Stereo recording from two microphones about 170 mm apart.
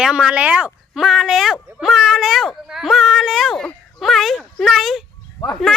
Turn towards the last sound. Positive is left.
turn(degrees=20)  # may be behind; listen again after turning